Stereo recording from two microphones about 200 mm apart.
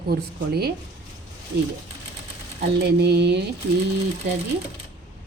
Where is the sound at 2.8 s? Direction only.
55° right (ahead or behind).